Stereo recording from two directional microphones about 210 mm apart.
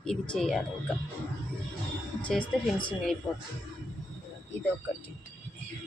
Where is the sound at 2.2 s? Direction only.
5° left (ahead or behind).